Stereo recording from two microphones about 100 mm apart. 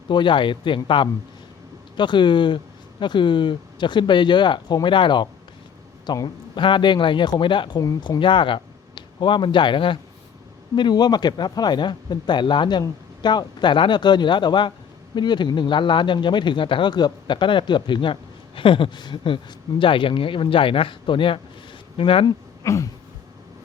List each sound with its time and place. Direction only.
0.1 s speech: 55° left (ahead or behind)
2.0 s speech: 50° left (ahead or behind)
10.8 s a man's voice: 45° left (ahead or behind); by 22.3 s 65° left (ahead or behind)
22.6 s a sound: 30° left (ahead or behind)